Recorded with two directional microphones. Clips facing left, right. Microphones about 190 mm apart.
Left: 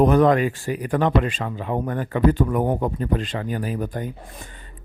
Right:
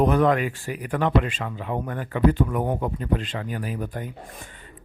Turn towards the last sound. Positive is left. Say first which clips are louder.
# left 4 dB
turn(degrees=35)  # may be behind; listen again after turning